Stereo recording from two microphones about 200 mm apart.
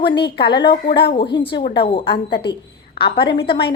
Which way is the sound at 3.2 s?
25° left (ahead or behind).